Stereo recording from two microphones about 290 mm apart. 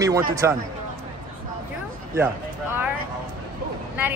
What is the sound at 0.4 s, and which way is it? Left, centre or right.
Speech, centre.